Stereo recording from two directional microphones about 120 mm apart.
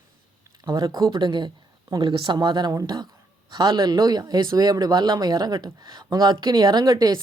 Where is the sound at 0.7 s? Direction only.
35° right (ahead or behind).